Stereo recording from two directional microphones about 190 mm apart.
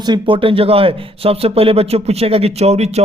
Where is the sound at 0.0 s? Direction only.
25° right (ahead or behind).